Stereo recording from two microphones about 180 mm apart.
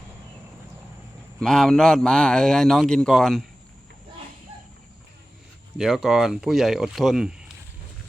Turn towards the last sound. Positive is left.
turn(degrees=0)  # may be behind; listen again after turning